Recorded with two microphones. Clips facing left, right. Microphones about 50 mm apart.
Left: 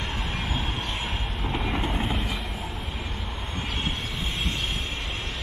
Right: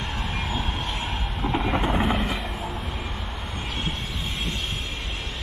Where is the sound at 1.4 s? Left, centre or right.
Centre.